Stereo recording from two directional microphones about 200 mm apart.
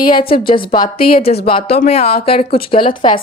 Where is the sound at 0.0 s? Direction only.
25° left (ahead or behind).